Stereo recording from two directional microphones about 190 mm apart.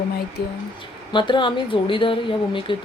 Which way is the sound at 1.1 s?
25° left (ahead or behind).